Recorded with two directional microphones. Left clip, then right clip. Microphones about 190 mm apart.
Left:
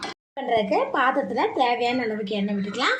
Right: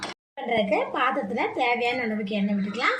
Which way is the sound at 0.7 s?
20° left (ahead or behind).